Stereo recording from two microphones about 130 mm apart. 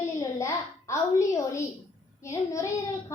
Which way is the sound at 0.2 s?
25° left (ahead or behind).